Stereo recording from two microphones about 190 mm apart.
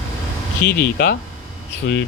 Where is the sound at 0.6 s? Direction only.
55° left (ahead or behind).